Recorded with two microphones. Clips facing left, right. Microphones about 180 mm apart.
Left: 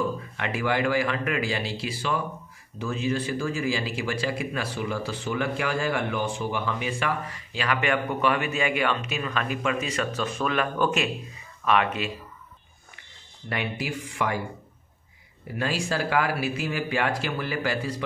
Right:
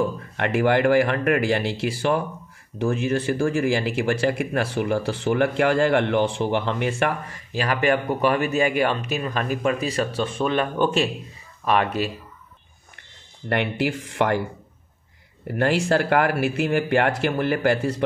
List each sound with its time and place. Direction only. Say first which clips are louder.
0.4 s speech: right 7 dB; 60° right (ahead or behind); by 12.1 s 40° right (ahead or behind)
13.5 s speech: right 7 dB; 65° right (ahead or behind)
15.4 s speech: right 7 dB; 60° right (ahead or behind)